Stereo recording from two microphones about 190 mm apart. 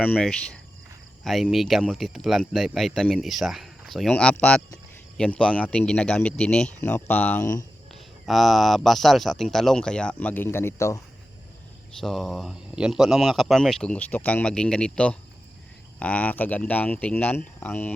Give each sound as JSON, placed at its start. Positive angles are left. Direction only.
{"t": 0.0, "sound": "speech", "side_deg": 5}
{"t": 8.3, "sound": "speech", "side_deg": 0}
{"t": 11.9, "sound": "speech", "side_deg": 0}